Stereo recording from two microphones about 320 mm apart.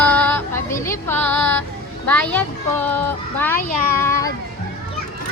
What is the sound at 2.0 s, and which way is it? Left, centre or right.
A child's voice, centre.